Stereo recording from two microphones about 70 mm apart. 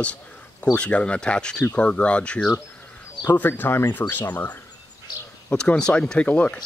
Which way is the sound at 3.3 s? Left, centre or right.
Left.